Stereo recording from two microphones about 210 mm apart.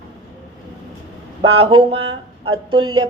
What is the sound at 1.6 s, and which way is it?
Speech, 20° right (ahead or behind).